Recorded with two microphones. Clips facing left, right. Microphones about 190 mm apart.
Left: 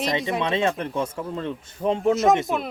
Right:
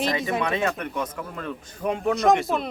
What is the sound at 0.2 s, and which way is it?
Speech, centre (ahead or behind).